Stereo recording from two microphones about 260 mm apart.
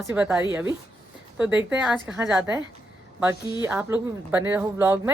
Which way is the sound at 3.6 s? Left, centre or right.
Centre.